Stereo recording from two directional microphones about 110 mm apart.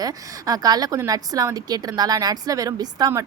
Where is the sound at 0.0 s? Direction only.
35° right (ahead or behind).